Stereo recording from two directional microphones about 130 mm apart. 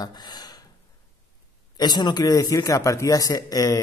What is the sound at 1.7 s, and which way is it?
Speech, 35° left (ahead or behind).